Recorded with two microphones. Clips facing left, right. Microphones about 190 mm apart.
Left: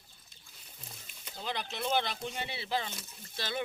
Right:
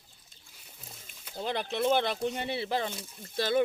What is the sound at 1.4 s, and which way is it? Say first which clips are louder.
Speech: right 7 dB; 50° right (ahead or behind).